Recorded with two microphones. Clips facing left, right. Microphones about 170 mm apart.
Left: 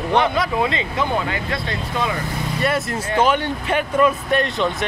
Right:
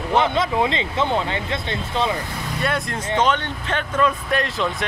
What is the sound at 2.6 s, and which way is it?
Speech, 5° left (ahead or behind).